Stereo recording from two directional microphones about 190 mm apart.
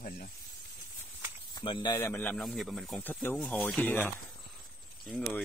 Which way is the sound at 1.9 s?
15° left (ahead or behind).